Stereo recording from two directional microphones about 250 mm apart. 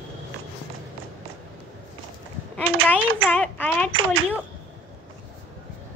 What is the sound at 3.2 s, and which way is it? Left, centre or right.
Speech, centre.